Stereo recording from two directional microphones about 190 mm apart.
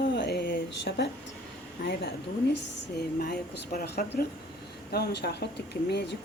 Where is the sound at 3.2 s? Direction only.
55° left (ahead or behind).